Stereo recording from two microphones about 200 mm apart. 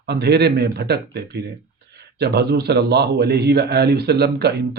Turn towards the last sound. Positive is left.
turn(degrees=-55)  # may be behind; listen again after turning